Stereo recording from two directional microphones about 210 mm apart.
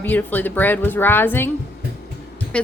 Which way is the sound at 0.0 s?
10° left (ahead or behind).